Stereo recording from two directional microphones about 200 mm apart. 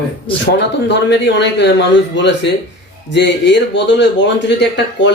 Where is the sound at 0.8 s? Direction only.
60° left (ahead or behind).